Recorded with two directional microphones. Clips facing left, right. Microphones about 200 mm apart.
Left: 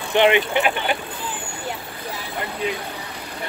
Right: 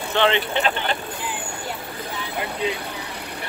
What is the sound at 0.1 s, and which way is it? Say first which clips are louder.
Speech: left 4 dB; 15° left (ahead or behind).